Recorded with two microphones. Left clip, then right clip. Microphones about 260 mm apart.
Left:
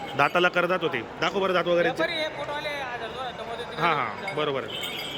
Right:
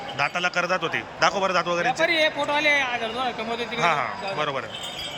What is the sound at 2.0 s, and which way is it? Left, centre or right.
Speech, right.